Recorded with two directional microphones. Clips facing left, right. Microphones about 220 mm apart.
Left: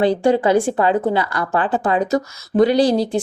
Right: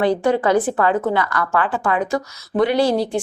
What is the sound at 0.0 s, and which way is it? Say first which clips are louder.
Speech: left 2 dB; 30° left (ahead or behind).